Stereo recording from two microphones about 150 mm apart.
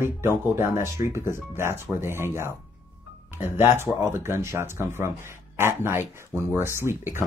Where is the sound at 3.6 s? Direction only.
15° right (ahead or behind).